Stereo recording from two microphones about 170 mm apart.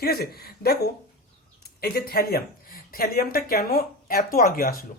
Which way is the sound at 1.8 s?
65° left (ahead or behind).